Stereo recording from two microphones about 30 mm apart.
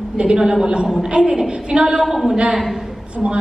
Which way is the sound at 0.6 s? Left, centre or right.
Right.